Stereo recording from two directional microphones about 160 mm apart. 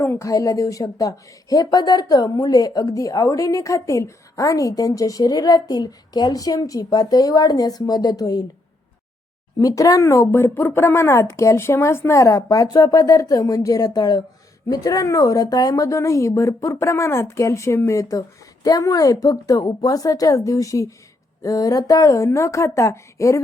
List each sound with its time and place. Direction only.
0.0 s a woman's voice: 15° left (ahead or behind)
9.6 s a woman's voice: 20° left (ahead or behind)